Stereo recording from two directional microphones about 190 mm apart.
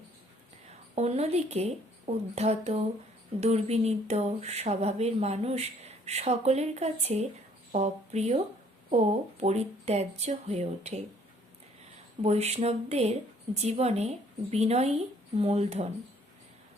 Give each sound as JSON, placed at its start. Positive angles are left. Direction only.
{"t": 0.9, "sound": "speech", "side_deg": -35}
{"t": 9.4, "sound": "speech", "side_deg": -35}
{"t": 12.2, "sound": "speech", "side_deg": -35}